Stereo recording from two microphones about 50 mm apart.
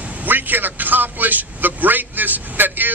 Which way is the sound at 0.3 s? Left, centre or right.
Right.